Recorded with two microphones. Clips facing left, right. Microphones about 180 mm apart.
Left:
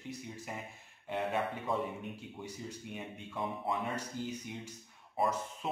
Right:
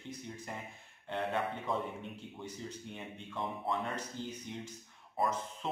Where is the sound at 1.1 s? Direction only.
5° left (ahead or behind).